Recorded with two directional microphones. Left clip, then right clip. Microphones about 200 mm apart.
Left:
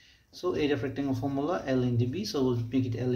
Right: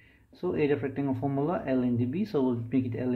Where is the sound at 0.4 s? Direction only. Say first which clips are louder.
Right 1 dB; 30° right (ahead or behind).